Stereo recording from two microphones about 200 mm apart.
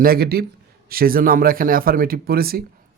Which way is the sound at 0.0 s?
50° right (ahead or behind).